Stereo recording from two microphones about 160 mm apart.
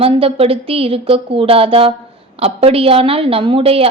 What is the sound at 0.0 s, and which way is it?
A woman's voice, 35° right (ahead or behind).